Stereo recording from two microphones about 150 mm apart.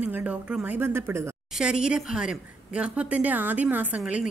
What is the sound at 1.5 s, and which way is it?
A woman's voice, 5° right (ahead or behind).